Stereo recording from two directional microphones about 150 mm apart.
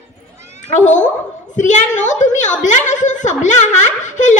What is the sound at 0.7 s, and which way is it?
A woman's voice, 55° left (ahead or behind).